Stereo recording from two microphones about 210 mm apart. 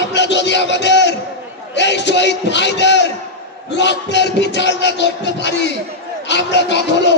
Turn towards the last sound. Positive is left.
turn(degrees=55)  # may be behind; listen again after turning